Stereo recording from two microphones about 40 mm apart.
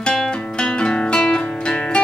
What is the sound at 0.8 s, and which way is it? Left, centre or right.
Music, left.